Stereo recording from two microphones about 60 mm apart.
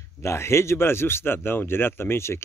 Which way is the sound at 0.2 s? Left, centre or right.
Left.